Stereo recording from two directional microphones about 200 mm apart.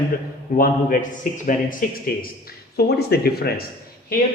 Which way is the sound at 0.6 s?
45° left (ahead or behind).